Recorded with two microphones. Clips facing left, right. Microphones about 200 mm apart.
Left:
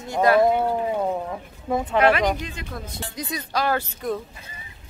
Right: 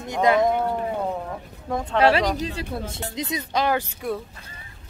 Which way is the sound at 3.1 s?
20° right (ahead or behind).